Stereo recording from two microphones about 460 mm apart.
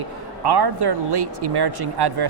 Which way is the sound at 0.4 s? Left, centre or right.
Right.